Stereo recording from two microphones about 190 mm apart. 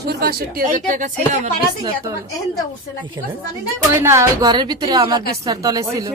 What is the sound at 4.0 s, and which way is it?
Speech, 15° right (ahead or behind).